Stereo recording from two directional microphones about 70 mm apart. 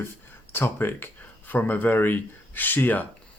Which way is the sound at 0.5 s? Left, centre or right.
Left.